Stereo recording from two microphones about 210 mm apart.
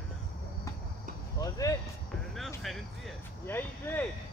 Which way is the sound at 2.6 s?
Centre (ahead or behind).